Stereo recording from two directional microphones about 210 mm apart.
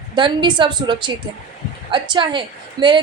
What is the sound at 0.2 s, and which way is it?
A woman's voice, 20° right (ahead or behind).